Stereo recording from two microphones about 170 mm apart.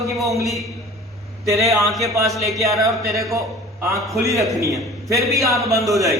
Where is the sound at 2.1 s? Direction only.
20° right (ahead or behind).